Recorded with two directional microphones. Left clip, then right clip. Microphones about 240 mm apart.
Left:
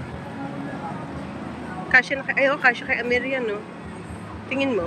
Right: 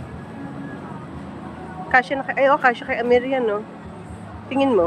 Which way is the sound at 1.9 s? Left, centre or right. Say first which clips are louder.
Even; centre.